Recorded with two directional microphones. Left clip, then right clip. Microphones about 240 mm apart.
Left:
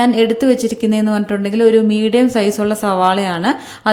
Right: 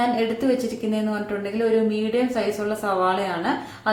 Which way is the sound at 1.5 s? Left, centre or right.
Left.